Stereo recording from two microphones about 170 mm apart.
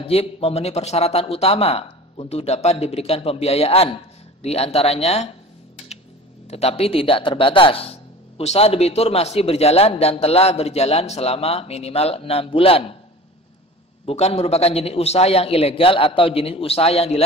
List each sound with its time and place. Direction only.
0.0 s a man's voice: 35° left (ahead or behind)
6.5 s a man's voice: 35° left (ahead or behind)
14.0 s a man's voice: 40° left (ahead or behind)